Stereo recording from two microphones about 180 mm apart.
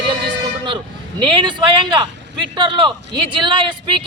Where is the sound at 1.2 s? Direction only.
25° right (ahead or behind).